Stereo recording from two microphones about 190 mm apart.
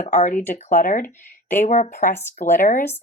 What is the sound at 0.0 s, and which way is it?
Speech, 40° left (ahead or behind).